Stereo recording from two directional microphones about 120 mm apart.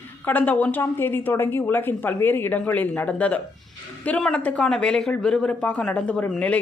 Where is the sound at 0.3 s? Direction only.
15° left (ahead or behind).